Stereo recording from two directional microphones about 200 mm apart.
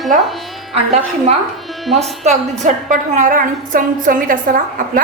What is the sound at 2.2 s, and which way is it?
A woman's voice, 35° right (ahead or behind).